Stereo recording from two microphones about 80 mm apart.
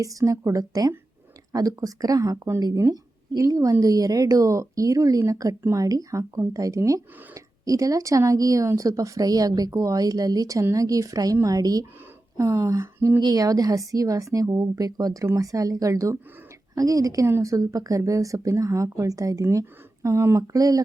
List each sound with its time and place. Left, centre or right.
0.0 s speech: right
13.1 s speech: right
20.6 s speech: right